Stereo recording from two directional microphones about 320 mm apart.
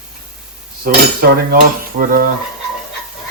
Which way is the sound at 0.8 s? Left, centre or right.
Right.